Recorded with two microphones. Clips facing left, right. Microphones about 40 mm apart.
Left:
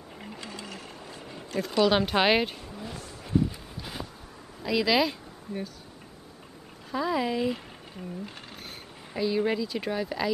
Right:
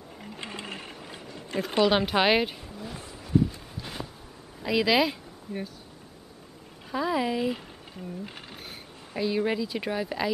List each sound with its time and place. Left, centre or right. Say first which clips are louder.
0.4 s sewing machine: right 5 dB; right
1.5 s speech: right 1 dB; right
1.9 s speech: even; centre
2.7 s a sound: even; centre
4.6 s speech: right 1 dB; centre
6.9 s speech: right 1 dB; centre